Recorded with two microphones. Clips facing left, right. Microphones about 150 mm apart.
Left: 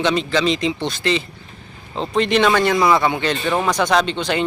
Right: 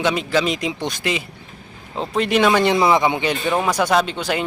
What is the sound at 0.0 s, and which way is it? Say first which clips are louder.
A man's voice: left 1 dB; 10° right (ahead or behind).